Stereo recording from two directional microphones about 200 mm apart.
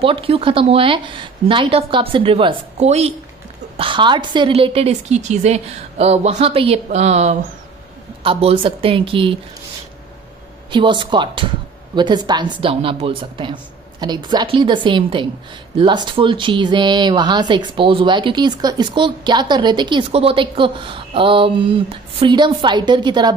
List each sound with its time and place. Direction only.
0.0 s a woman's voice: 25° right (ahead or behind)
10.7 s speech: 25° right (ahead or behind)